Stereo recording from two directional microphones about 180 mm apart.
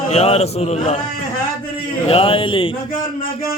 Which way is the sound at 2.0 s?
30° left (ahead or behind).